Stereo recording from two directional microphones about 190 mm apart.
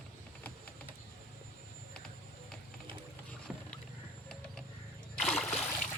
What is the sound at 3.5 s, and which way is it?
Rowboat, 5° right (ahead or behind).